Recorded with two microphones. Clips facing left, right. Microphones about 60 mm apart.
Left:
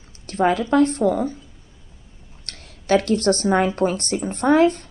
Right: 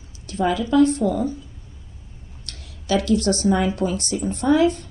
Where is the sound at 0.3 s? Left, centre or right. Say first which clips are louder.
Left 2 dB; left.